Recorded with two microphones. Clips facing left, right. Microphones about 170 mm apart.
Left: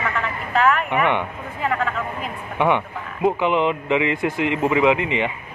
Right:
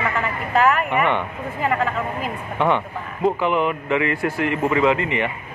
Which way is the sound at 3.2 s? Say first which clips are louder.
Left 1 dB; 20° left (ahead or behind).